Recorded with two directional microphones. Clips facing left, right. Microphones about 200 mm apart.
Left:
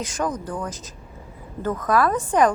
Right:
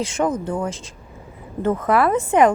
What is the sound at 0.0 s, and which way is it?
A woman's voice, 25° right (ahead or behind).